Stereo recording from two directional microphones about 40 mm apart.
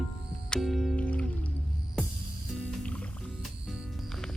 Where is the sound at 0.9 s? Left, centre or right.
Left.